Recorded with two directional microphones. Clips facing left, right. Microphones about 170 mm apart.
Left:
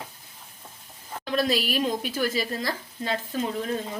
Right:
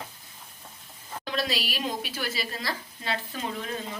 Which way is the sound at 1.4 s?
50° left (ahead or behind).